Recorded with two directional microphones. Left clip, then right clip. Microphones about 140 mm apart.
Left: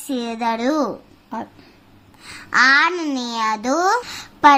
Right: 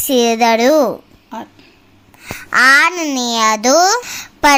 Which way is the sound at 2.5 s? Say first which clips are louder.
Right 4 dB; 50° right (ahead or behind).